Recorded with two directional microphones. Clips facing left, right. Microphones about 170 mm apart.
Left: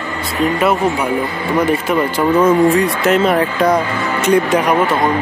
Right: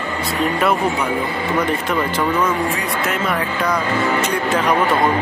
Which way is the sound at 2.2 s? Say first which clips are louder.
Left 11 dB; 25° left (ahead or behind).